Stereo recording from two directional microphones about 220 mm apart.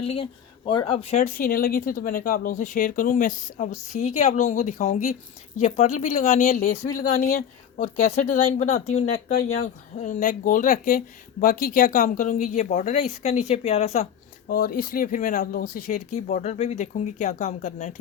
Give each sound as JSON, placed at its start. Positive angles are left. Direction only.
{"t": 0.0, "sound": "a woman's voice", "side_deg": 25}
{"t": 14.4, "sound": "a woman's voice", "side_deg": 40}